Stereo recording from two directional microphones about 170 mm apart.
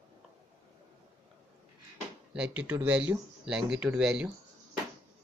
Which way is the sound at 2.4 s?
10° right (ahead or behind).